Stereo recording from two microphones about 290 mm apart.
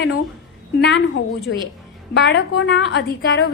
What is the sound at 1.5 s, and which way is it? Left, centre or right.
A woman's voice, left.